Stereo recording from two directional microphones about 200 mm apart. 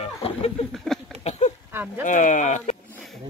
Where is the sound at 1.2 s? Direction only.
35° left (ahead or behind).